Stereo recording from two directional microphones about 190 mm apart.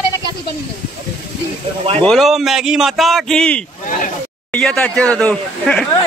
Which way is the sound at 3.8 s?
45° left (ahead or behind).